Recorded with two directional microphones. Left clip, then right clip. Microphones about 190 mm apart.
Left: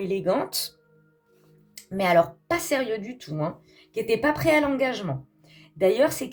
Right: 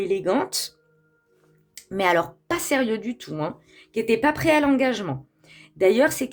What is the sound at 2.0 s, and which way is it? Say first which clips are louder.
Speech: left 1 dB; 45° right (ahead or behind).